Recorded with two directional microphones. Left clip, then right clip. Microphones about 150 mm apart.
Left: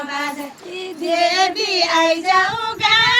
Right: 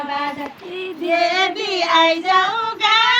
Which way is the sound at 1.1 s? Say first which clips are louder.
Left 1 dB; 45° left (ahead or behind).